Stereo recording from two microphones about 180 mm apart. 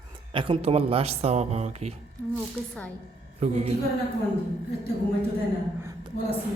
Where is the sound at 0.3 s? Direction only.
30° right (ahead or behind).